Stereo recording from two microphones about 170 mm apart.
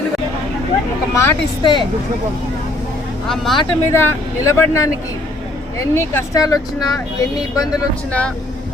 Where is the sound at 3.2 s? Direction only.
Centre (ahead or behind).